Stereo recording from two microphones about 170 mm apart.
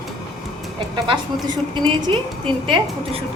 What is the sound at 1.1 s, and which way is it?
A woman's voice, 25° right (ahead or behind).